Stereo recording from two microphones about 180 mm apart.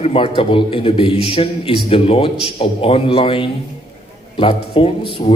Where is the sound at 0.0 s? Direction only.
30° left (ahead or behind).